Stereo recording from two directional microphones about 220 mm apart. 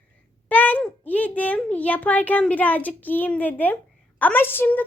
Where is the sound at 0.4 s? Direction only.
5° left (ahead or behind).